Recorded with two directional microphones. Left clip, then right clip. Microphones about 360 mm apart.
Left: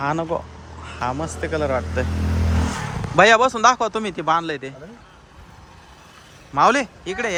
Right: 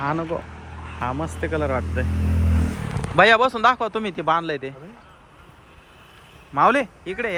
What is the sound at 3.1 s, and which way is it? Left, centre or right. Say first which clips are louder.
Speech: left 2 dB; centre.